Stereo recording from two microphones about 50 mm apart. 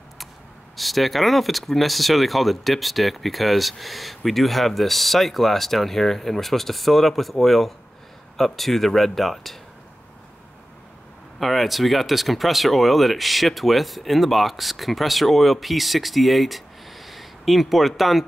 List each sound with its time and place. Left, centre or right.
0.7 s speech: centre
11.3 s speech: centre